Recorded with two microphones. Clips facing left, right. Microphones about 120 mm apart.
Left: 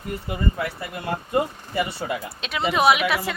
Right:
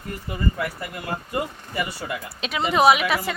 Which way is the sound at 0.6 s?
25° left (ahead or behind).